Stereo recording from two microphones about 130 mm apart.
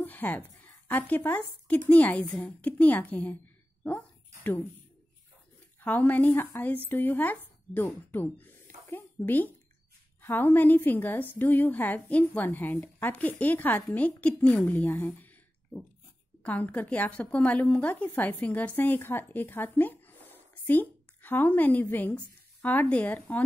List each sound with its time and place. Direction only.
0.0 s a woman's voice: 15° left (ahead or behind)
4.4 s speech: 15° left (ahead or behind)
5.8 s a woman's voice: 15° left (ahead or behind)